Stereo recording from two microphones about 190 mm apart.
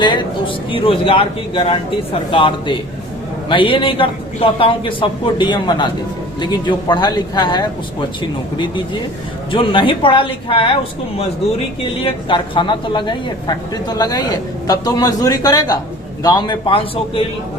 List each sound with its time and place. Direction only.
0.0 s a woman's voice: 25° left (ahead or behind)
12.0 s a woman's voice: 25° left (ahead or behind)